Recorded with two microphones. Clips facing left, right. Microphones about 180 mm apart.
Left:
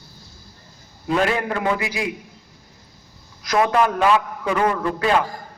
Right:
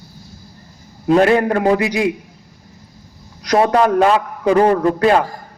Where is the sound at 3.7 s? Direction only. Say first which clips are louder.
Right 4 dB; 40° right (ahead or behind).